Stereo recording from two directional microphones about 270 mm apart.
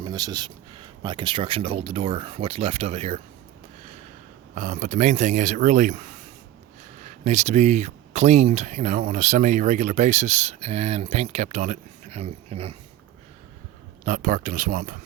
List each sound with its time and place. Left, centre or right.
0.0 s speech: centre
4.5 s speech: right
14.0 s speech: right